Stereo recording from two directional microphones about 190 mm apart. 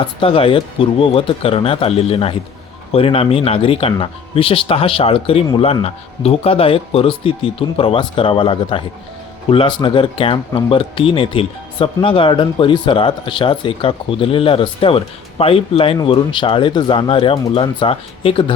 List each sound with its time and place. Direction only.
0.0 s speech: 25° left (ahead or behind)